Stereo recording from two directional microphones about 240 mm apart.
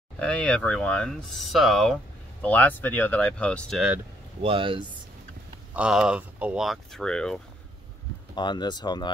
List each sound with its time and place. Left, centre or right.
0.2 s speech: centre
4.4 s speech: right
5.8 s speech: centre
8.4 s speech: centre